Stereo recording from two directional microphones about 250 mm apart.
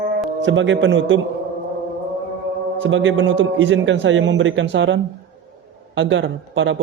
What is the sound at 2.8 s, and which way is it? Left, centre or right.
A man's voice, right.